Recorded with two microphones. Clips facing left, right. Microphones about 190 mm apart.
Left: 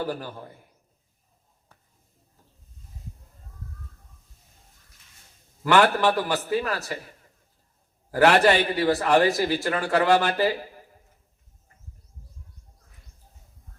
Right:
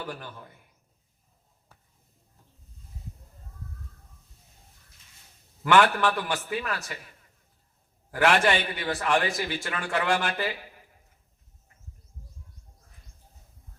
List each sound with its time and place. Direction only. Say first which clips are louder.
0.1 s a man's voice: left 7 dB; 35° left (ahead or behind)
5.7 s a man's voice: left 2 dB; 40° left (ahead or behind)
8.1 s a man's voice: left 5 dB; 40° left (ahead or behind)